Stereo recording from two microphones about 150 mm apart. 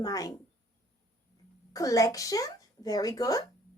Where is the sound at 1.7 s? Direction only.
20° left (ahead or behind).